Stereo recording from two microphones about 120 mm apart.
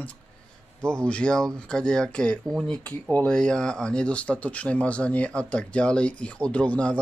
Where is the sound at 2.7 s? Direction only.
10° left (ahead or behind).